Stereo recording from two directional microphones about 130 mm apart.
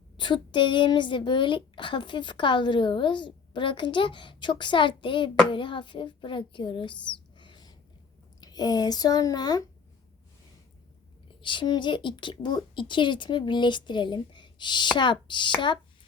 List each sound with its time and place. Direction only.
0.2 s a woman's voice: 40° left (ahead or behind)
11.4 s a woman's voice: 35° left (ahead or behind)